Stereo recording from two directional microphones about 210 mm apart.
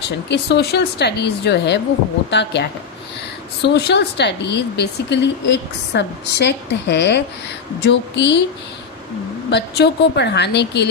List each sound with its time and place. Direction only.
0.3 s a woman's voice: 55° left (ahead or behind)
9.5 s speech: 55° left (ahead or behind)